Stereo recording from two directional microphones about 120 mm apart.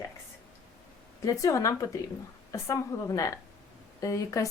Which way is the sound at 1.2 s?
25° left (ahead or behind).